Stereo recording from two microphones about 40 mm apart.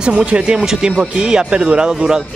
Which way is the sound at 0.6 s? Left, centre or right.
Centre.